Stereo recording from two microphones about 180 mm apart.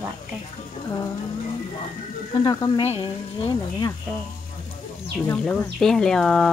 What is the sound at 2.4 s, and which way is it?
A woman's voice, 20° left (ahead or behind).